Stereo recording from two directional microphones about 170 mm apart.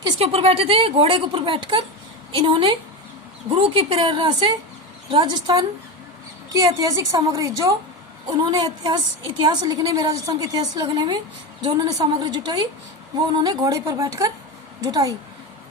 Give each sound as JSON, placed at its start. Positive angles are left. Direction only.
{"t": 0.0, "sound": "a woman's voice", "side_deg": -35}